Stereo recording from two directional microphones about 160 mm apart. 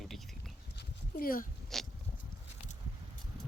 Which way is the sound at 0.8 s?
70° left (ahead or behind).